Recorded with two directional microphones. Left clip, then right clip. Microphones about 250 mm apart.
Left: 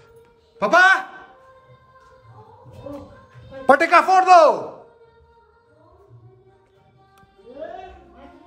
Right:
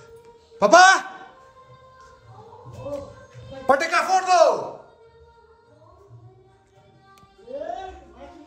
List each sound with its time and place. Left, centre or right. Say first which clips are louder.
0.6 s a man's voice: right 1 dB; centre
3.6 s a woman's voice: left 4 dB; left
3.9 s a man's voice: left 7 dB; centre